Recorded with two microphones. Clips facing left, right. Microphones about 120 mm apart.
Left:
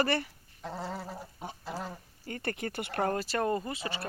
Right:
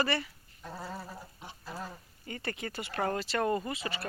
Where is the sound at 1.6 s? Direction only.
75° left (ahead or behind).